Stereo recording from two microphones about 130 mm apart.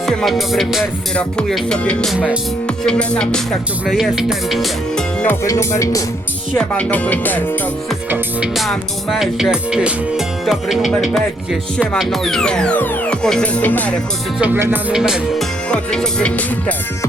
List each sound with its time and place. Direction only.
0.0 s music: 5° left (ahead or behind)
2.1 s music: 10° right (ahead or behind)
2.6 s music: 5° left (ahead or behind)
5.2 s speech: 20° left (ahead or behind)
6.5 s music: 10° left (ahead or behind)
8.5 s music: centre (ahead or behind)
14.3 s music: 10° right (ahead or behind)
14.9 s music: 5° right (ahead or behind); by 16.7 s 10° left (ahead or behind)